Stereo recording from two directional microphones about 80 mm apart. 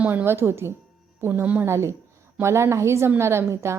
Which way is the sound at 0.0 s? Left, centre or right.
Centre.